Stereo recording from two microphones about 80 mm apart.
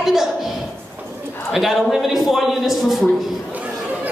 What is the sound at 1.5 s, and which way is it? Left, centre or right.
A man's voice, centre.